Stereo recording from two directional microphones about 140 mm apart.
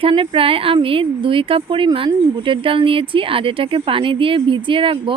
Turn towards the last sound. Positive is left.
turn(degrees=-40)  # may be behind; listen again after turning